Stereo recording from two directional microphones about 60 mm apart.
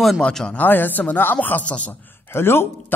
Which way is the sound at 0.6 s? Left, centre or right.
Left.